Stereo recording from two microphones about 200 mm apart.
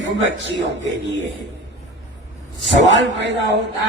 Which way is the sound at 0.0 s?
65° right (ahead or behind).